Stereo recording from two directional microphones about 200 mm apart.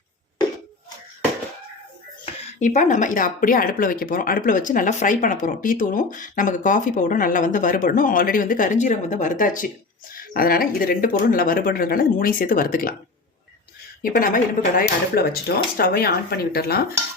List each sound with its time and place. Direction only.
2.2 s speech: 35° left (ahead or behind)
14.0 s speech: 40° left (ahead or behind)